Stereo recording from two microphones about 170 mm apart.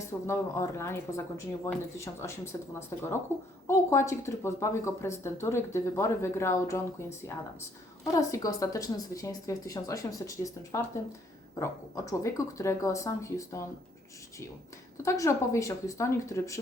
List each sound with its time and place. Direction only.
0.3 s speech: 15° left (ahead or behind)
8.1 s a woman's voice: 20° left (ahead or behind)
15.0 s speech: 20° left (ahead or behind)